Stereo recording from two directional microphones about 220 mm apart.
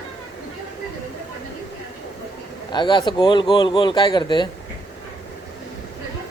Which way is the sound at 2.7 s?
20° left (ahead or behind).